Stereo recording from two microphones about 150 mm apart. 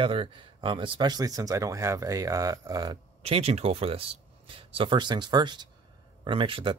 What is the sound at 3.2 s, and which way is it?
Speech, 45° right (ahead or behind).